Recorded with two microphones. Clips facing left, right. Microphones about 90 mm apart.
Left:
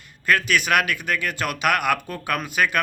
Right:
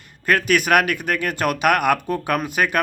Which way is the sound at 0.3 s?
45° right (ahead or behind).